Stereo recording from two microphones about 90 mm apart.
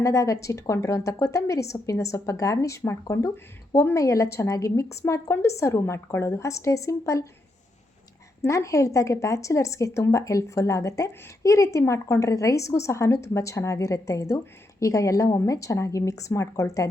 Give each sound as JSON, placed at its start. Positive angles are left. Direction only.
{"t": 0.0, "sound": "a woman's voice", "side_deg": 35}
{"t": 8.4, "sound": "a woman's voice", "side_deg": 35}